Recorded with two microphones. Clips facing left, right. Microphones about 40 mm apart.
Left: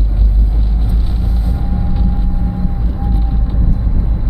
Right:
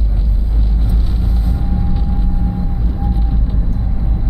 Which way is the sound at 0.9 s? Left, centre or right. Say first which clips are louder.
Even; centre.